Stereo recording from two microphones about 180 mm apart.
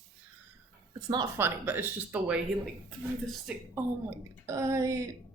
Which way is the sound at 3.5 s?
5° right (ahead or behind).